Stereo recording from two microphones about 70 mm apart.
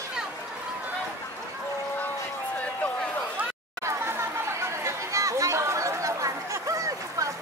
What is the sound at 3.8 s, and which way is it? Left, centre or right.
Chatter, right.